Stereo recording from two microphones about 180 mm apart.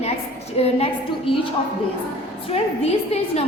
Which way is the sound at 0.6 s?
30° left (ahead or behind).